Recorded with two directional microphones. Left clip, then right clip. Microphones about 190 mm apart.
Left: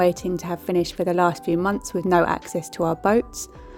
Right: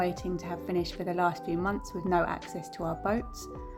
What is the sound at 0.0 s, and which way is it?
A woman's voice, 45° left (ahead or behind).